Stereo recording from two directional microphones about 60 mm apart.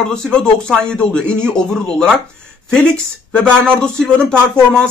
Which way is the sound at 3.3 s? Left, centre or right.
Centre.